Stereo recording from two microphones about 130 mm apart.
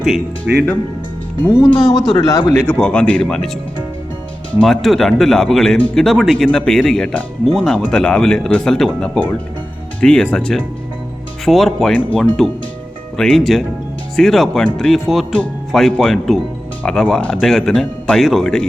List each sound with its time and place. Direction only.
0.0 s speech: centre (ahead or behind)
1.8 s speech: 30° left (ahead or behind)
2.6 s speech: 10° left (ahead or behind)
4.5 s speech: 5° left (ahead or behind)